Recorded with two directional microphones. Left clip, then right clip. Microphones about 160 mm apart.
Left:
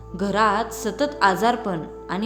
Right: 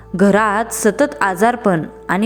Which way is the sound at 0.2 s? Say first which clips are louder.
Right 6 dB; 45° right (ahead or behind).